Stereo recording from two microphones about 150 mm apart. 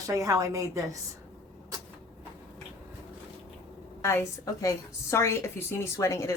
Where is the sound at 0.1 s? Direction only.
20° right (ahead or behind).